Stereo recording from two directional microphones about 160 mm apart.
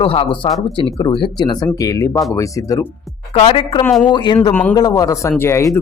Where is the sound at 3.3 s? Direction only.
35° left (ahead or behind).